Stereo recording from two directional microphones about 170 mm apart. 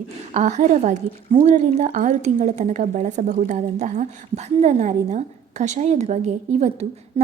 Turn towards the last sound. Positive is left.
turn(degrees=-40)  # may be behind; listen again after turning